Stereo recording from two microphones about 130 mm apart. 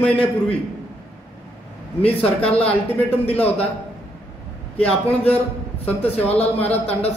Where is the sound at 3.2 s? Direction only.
50° left (ahead or behind).